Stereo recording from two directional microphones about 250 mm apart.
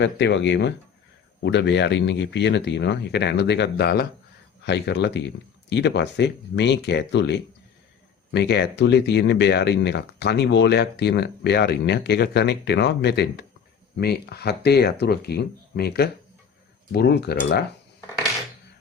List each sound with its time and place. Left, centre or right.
0.0 s speech: left